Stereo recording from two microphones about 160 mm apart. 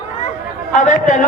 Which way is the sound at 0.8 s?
50° left (ahead or behind).